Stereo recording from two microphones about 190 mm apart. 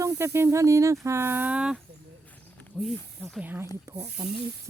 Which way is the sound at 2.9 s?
5° left (ahead or behind).